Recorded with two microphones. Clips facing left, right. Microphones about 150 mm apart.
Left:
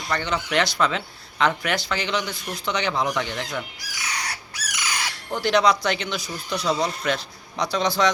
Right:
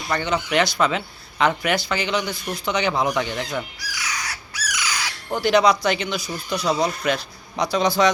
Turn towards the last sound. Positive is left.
turn(degrees=-5)  # may be behind; listen again after turning